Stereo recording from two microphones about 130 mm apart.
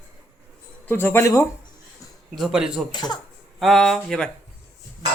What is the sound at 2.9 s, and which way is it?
Speech, 35° left (ahead or behind).